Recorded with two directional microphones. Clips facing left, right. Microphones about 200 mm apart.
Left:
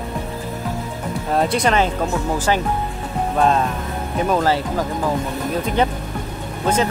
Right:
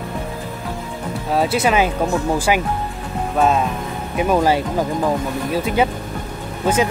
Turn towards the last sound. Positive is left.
turn(degrees=-10)  # may be behind; listen again after turning